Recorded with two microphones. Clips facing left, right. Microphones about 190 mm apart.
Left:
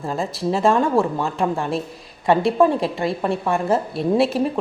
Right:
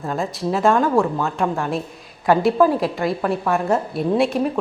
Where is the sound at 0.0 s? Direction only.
Centre (ahead or behind).